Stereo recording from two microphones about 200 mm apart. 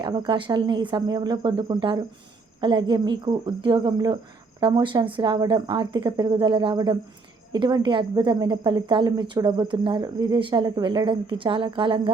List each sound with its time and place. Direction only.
0.0 s a woman's voice: 25° right (ahead or behind)